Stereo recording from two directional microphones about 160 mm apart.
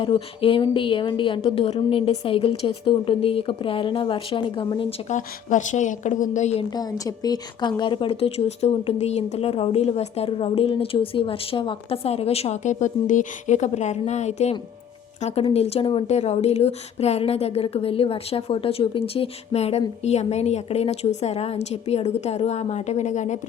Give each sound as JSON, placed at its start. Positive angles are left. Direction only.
{"t": 0.0, "sound": "speech", "side_deg": 35}
{"t": 5.0, "sound": "a woman's voice", "side_deg": 50}
{"t": 6.7, "sound": "a woman's voice", "side_deg": 25}